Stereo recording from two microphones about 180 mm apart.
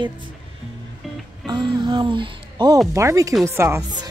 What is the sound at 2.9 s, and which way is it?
Speech, 15° right (ahead or behind).